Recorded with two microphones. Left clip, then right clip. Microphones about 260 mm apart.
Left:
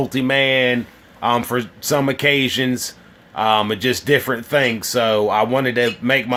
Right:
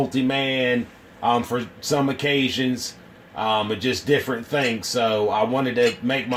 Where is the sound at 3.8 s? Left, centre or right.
Left.